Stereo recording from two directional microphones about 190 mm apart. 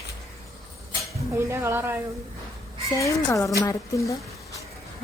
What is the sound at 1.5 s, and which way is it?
Speech, 15° right (ahead or behind).